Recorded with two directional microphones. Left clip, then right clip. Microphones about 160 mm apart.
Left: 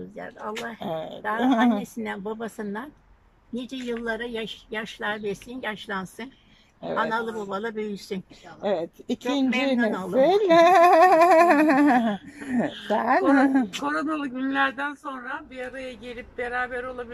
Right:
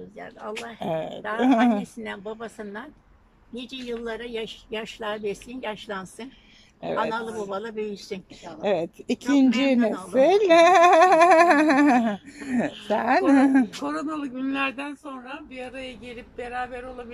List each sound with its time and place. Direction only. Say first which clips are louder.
0.1 s speech: left 2 dB; 5° left (ahead or behind)
0.7 s speech: right 2 dB; 5° right (ahead or behind)
2.0 s a woman's voice: left 2 dB; 10° left (ahead or behind)
12.6 s speech: even; 10° right (ahead or behind)